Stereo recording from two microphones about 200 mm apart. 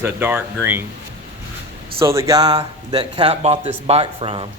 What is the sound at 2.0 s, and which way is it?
Speech, 15° right (ahead or behind).